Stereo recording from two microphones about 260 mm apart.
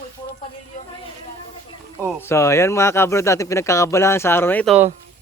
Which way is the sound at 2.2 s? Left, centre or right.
Centre.